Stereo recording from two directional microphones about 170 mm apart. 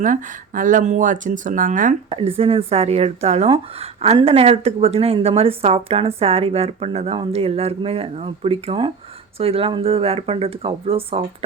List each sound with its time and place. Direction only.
0.0 s speech: 50° right (ahead or behind)
2.0 s speech: 35° right (ahead or behind)